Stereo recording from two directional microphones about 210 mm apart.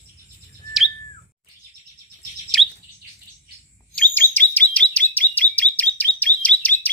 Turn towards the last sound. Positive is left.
turn(degrees=5)  # may be behind; listen again after turning